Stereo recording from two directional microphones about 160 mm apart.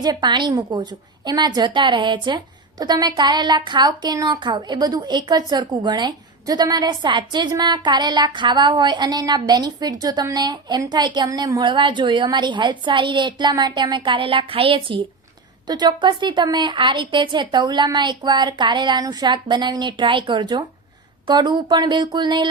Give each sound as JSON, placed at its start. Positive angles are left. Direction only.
{"t": 0.0, "sound": "a woman's voice", "side_deg": -25}